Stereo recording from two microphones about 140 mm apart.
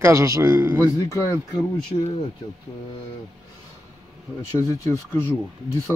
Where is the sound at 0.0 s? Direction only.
20° right (ahead or behind).